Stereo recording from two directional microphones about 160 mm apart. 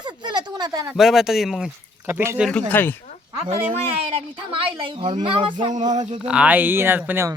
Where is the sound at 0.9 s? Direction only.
Centre (ahead or behind).